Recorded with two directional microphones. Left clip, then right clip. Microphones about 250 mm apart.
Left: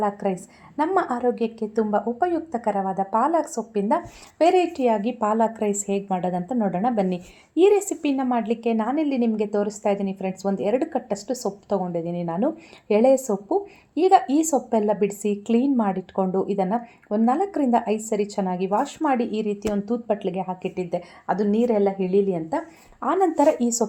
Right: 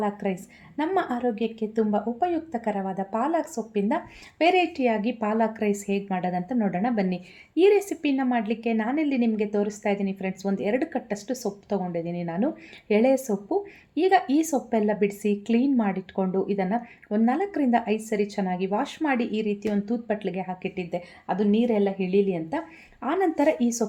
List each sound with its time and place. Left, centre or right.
0.0 s a woman's voice: left